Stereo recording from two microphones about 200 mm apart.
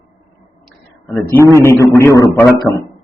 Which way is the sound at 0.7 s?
5° left (ahead or behind).